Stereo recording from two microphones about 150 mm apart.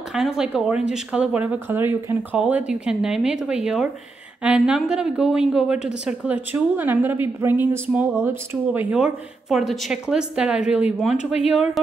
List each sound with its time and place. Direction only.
0.1 s a woman's voice: 5° right (ahead or behind)
8.9 s speech: 5° right (ahead or behind)
11.1 s speech: 45° left (ahead or behind)
11.5 s speech: centre (ahead or behind)